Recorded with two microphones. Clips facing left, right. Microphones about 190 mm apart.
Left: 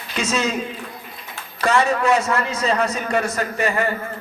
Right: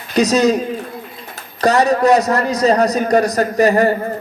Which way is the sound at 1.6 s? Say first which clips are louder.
Right 6 dB; 40° right (ahead or behind).